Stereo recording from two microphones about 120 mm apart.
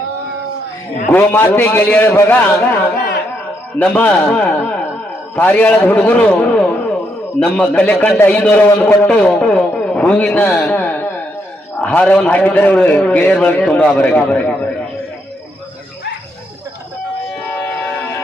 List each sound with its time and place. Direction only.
1.1 s a man's voice: 20° left (ahead or behind)
3.8 s a man's voice: 10° left (ahead or behind)
17.5 s music: 15° left (ahead or behind)